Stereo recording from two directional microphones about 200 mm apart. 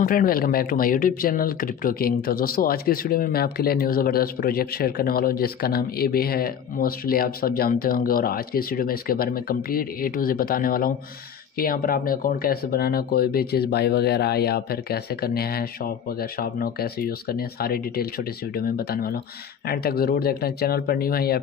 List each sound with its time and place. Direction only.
0.0 s speech: 45° left (ahead or behind)